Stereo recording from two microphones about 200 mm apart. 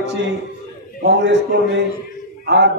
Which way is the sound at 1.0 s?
60° right (ahead or behind).